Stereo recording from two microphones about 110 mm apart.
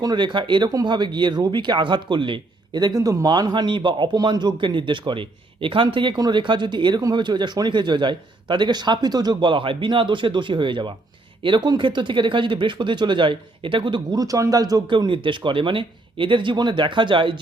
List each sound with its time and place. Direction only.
0.0 s speech: 45° right (ahead or behind)